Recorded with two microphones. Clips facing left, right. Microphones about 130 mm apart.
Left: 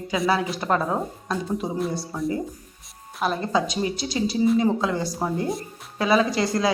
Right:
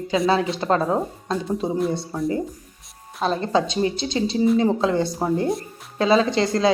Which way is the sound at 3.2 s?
30° right (ahead or behind).